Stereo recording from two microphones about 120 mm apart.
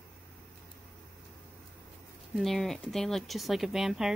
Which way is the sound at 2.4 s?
Centre (ahead or behind).